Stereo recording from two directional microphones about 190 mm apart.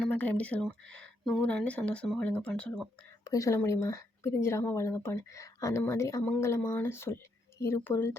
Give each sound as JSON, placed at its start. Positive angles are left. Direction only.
{"t": 0.0, "sound": "speech", "side_deg": 10}
{"t": 3.2, "sound": "speech", "side_deg": 15}